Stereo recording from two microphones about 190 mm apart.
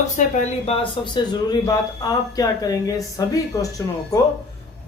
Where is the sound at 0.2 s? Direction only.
35° left (ahead or behind); by 3.7 s 20° left (ahead or behind).